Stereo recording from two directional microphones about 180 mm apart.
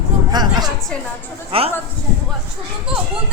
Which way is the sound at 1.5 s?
30° right (ahead or behind).